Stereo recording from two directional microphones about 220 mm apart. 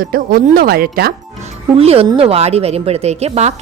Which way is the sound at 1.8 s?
25° right (ahead or behind).